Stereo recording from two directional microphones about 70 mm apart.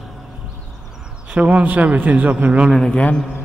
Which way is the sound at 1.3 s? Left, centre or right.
Centre.